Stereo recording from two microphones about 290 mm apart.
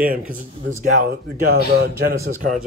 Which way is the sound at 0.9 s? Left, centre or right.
Right.